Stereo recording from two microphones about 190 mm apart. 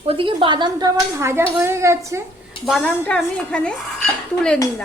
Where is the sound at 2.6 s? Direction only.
Centre (ahead or behind).